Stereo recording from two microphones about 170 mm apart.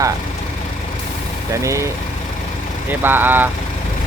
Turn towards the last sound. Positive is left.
turn(degrees=-10)  # may be behind; listen again after turning